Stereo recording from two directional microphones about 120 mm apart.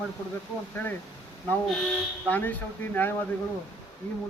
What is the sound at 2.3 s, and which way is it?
Speech, 15° left (ahead or behind).